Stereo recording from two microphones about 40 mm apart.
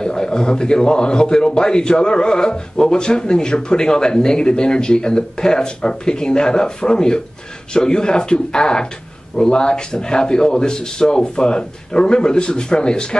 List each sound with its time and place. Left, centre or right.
0.0 s a man's voice: centre